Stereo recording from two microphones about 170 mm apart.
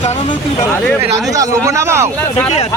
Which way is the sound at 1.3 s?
20° right (ahead or behind).